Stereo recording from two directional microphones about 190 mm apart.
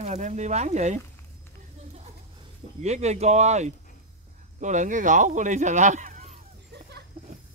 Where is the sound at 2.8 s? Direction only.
35° right (ahead or behind).